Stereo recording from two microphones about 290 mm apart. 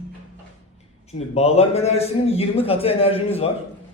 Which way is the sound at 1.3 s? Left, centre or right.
Left.